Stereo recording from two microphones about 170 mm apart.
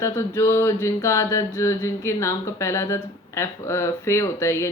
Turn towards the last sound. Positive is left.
turn(degrees=15)  # may be behind; listen again after turning